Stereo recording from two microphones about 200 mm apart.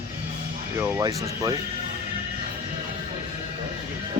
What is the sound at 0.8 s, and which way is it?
Speech, 10° right (ahead or behind).